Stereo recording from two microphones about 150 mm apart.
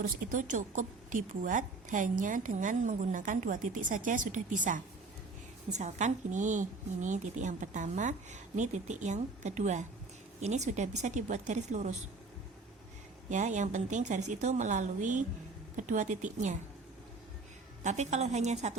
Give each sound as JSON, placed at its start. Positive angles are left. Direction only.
{"t": 0.3, "sound": "a woman's voice", "side_deg": -55}
{"t": 13.3, "sound": "a woman's voice", "side_deg": -55}
{"t": 17.8, "sound": "a woman's voice", "side_deg": -50}